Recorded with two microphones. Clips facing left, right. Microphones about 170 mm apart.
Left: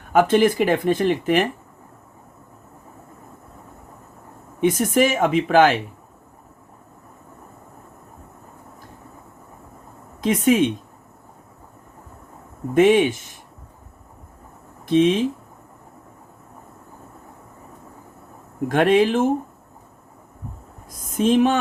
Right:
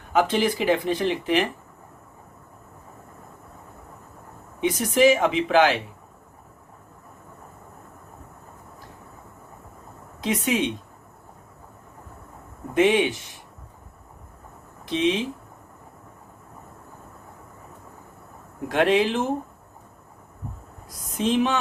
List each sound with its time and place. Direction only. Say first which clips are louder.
0.1 s speech: left 5 dB; 50° left (ahead or behind)
4.6 s speech: left 1 dB; 50° left (ahead or behind)
10.2 s speech: left 7 dB; 50° left (ahead or behind)
12.7 s speech: left 5 dB; 45° left (ahead or behind)
14.8 s speech: left 6 dB; 50° left (ahead or behind)
18.7 s speech: left 4 dB; 50° left (ahead or behind)
21.2 s speech: left 5 dB; 50° left (ahead or behind)